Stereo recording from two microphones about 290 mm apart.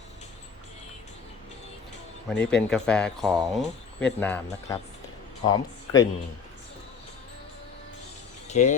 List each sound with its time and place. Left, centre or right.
2.3 s speech: centre
8.4 s speech: left